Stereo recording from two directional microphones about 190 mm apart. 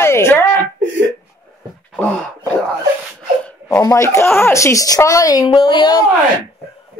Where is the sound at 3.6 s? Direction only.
15° left (ahead or behind).